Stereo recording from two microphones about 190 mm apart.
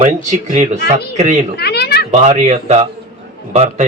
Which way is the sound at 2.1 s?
35° right (ahead or behind).